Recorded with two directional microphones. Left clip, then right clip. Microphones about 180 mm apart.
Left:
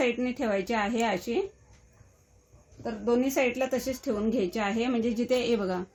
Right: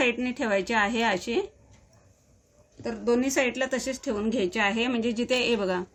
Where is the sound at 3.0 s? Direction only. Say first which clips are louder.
Right 1 dB; 25° left (ahead or behind).